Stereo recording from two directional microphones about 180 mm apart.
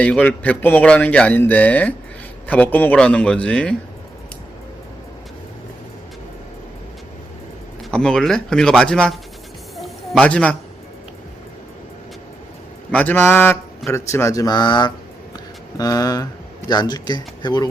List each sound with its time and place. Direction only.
0.0 s a man's voice: 10° left (ahead or behind)
7.9 s speech: 5° left (ahead or behind)
9.7 s a sound: 5° left (ahead or behind)
12.9 s a man's voice: 10° left (ahead or behind); by 17.7 s 25° left (ahead or behind)